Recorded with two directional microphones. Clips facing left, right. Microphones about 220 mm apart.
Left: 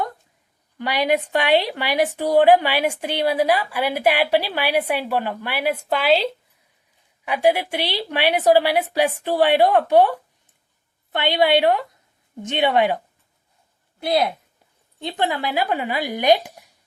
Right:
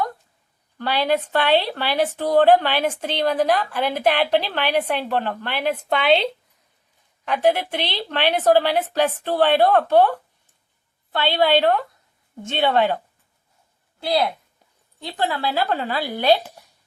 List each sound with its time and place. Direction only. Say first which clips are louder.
0.8 s a woman's voice: left 1 dB; 15° left (ahead or behind)
14.0 s a woman's voice: left 1 dB; 20° left (ahead or behind)